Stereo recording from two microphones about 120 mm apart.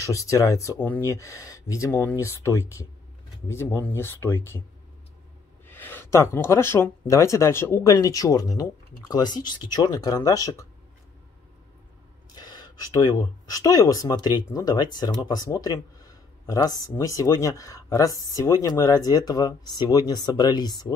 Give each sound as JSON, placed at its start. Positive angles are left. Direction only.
{"t": 0.0, "sound": "speech", "side_deg": 25}
{"t": 0.7, "sound": "speech", "side_deg": 15}
{"t": 1.1, "sound": "speech", "side_deg": 25}
{"t": 5.7, "sound": "speech", "side_deg": 15}
{"t": 12.4, "sound": "speech", "side_deg": 35}